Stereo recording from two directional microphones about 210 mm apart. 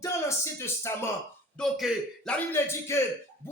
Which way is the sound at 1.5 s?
Centre (ahead or behind).